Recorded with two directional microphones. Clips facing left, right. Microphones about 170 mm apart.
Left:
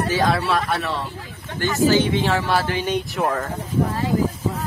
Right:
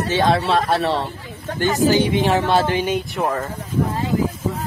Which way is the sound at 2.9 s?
Centre (ahead or behind).